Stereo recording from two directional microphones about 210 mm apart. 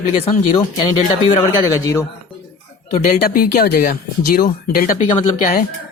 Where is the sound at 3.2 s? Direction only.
40° left (ahead or behind).